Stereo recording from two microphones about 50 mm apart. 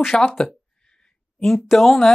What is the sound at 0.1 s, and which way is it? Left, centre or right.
Speech, centre.